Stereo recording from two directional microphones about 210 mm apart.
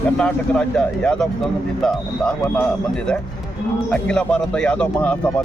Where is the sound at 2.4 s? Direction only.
5° left (ahead or behind).